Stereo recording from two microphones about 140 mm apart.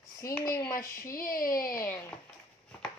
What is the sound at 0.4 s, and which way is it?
Speech, 30° left (ahead or behind).